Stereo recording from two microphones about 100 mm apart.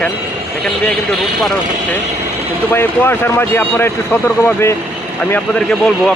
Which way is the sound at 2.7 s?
20° left (ahead or behind).